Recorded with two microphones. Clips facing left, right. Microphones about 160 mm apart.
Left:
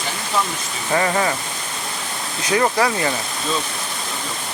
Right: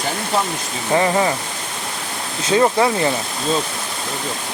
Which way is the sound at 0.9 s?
20° right (ahead or behind).